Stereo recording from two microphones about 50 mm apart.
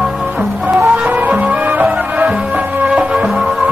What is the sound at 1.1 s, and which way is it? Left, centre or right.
Music, right.